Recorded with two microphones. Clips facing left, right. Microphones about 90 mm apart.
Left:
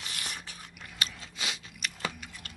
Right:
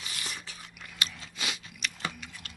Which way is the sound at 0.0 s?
55° left (ahead or behind).